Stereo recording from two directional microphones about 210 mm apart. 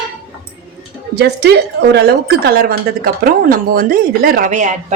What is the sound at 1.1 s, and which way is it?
Speech, 50° right (ahead or behind).